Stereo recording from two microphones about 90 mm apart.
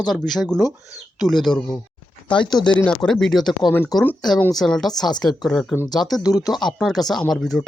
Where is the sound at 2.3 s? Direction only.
55° left (ahead or behind).